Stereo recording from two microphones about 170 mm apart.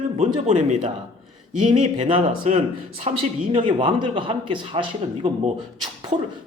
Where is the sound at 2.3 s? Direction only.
45° right (ahead or behind); by 4.9 s 30° right (ahead or behind).